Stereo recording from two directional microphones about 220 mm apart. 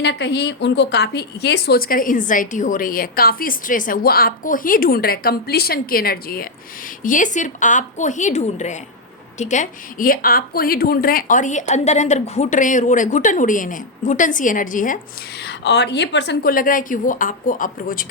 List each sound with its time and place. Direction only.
0.0 s a woman's voice: 50° left (ahead or behind)
15.4 s a woman's voice: 50° left (ahead or behind)